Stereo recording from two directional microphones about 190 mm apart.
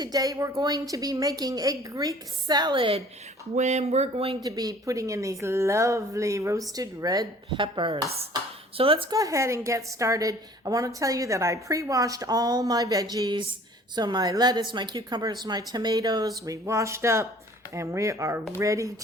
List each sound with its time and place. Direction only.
0.0 s a woman's voice: 20° right (ahead or behind)
4.4 s a woman's voice: 20° right (ahead or behind)